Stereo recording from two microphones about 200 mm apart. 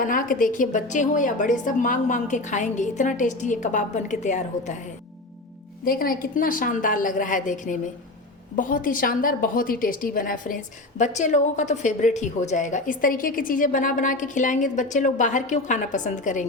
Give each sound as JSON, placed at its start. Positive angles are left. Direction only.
{"t": 0.0, "sound": "a woman's voice", "side_deg": 45}
{"t": 5.8, "sound": "a woman's voice", "side_deg": 45}